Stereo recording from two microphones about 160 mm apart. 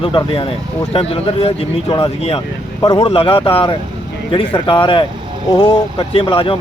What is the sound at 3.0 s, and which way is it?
Speech, 35° left (ahead or behind).